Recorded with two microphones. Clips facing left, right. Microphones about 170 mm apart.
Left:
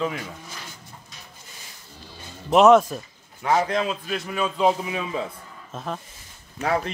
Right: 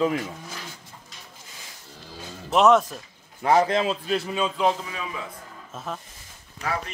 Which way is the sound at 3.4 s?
30° right (ahead or behind).